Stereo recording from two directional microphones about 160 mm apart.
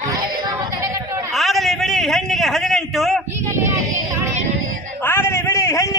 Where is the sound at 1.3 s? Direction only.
Centre (ahead or behind).